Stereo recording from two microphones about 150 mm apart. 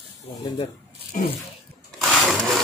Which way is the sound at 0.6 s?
50° left (ahead or behind).